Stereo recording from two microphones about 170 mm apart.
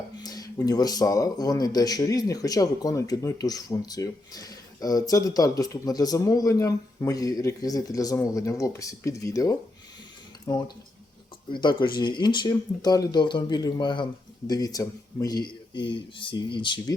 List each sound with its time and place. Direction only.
0.2 s speech: 20° left (ahead or behind)